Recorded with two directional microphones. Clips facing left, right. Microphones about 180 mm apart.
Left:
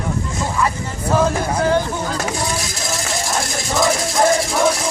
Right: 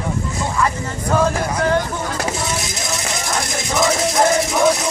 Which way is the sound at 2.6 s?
20° right (ahead or behind).